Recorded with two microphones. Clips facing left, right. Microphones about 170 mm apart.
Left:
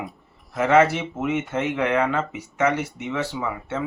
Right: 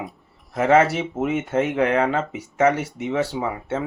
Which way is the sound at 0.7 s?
30° right (ahead or behind).